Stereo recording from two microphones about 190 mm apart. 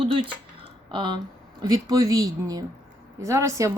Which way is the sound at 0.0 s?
30° right (ahead or behind).